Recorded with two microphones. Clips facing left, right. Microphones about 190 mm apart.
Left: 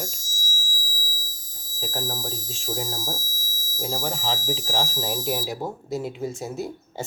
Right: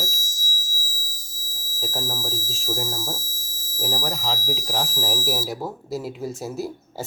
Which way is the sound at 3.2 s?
30° right (ahead or behind).